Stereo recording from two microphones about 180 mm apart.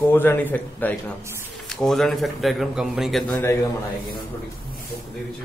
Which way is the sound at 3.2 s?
15° left (ahead or behind).